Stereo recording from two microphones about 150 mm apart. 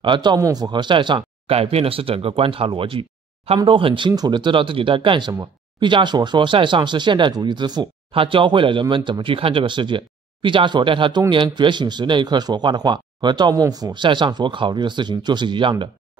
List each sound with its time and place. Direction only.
0.0 s speech: 30° right (ahead or behind)